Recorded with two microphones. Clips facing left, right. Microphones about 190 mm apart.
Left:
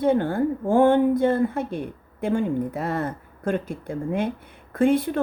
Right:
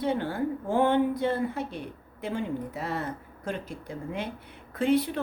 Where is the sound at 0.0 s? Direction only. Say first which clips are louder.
Left 7 dB; 50° left (ahead or behind).